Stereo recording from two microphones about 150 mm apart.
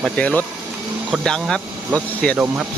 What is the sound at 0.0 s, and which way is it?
Speech, 5° left (ahead or behind).